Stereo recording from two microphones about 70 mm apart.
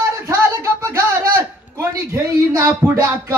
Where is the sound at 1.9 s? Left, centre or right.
Right.